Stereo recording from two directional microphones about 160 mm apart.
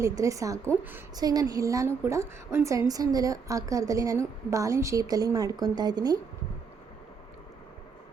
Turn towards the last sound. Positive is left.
turn(degrees=-25)  # may be behind; listen again after turning